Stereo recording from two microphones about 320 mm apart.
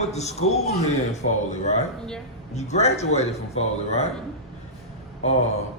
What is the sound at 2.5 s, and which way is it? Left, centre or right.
Speech, left.